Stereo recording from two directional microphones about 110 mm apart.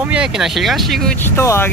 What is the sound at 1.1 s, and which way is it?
Speech, 20° left (ahead or behind).